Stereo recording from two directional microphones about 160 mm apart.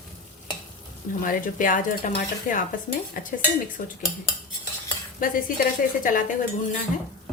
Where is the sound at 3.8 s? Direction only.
55° left (ahead or behind).